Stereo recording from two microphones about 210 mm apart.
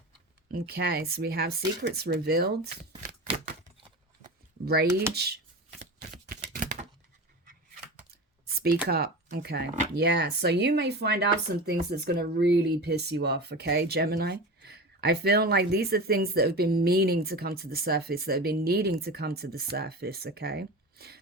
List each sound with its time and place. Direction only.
0.6 s speech: 50° right (ahead or behind)
2.9 s shuffling cards: 30° right (ahead or behind)
4.6 s speech: 50° right (ahead or behind)
6.0 s a sound: 45° right (ahead or behind)
8.9 s speech: 50° right (ahead or behind)